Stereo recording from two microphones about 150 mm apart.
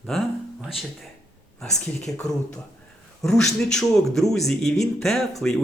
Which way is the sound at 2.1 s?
5° left (ahead or behind).